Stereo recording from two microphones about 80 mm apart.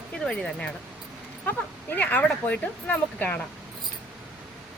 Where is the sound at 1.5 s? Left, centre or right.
Left.